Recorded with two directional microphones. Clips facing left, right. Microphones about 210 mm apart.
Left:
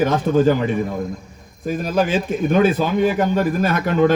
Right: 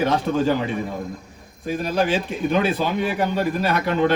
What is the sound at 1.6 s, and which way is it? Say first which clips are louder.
A man's voice: left 2 dB; 45° left (ahead or behind).